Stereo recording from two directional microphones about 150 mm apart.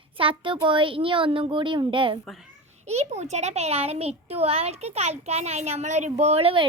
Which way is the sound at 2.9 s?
45° right (ahead or behind).